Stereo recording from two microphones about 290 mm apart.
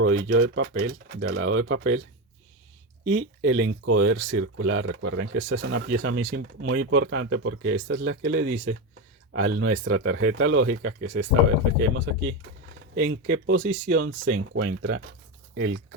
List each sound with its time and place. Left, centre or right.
0.0 s speech: right
3.1 s speech: right
13.0 s speech: right